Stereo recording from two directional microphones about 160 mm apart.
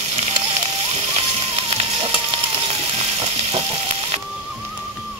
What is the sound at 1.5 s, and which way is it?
Music, 35° right (ahead or behind).